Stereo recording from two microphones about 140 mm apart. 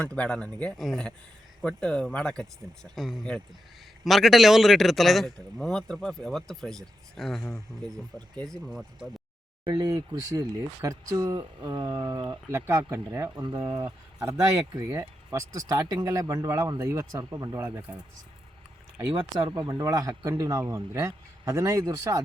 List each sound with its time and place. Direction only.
0.0 s a man's voice: 10° left (ahead or behind)
9.6 s speech: 30° right (ahead or behind)
17.7 s speech: 10° right (ahead or behind)
19.5 s speech: 30° right (ahead or behind)